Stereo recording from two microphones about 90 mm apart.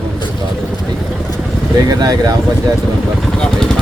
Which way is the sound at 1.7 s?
45° right (ahead or behind).